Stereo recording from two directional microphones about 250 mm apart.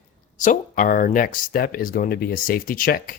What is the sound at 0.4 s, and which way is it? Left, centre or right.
Speech, left.